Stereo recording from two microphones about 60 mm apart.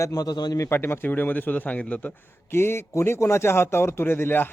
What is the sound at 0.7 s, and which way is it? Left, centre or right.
Speech, left.